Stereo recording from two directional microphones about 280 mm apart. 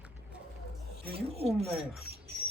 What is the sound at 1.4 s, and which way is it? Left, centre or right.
Speech, right.